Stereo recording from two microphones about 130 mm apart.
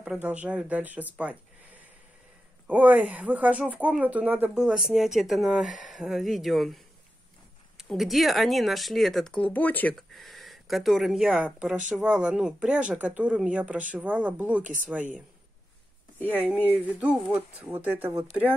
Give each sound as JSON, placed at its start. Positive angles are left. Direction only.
{"t": 0.0, "sound": "speech", "side_deg": -10}
{"t": 2.7, "sound": "speech", "side_deg": -10}
{"t": 9.9, "sound": "speech", "side_deg": 0}
{"t": 14.6, "sound": "speech", "side_deg": -80}
{"t": 16.2, "sound": "speech", "side_deg": 10}
{"t": 16.7, "sound": "speech", "side_deg": -10}